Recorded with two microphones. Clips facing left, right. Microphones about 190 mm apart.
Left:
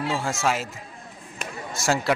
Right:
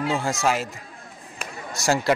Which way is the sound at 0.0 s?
Centre (ahead or behind).